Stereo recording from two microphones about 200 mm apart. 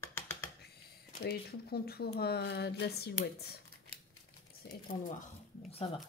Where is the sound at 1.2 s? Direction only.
50° left (ahead or behind).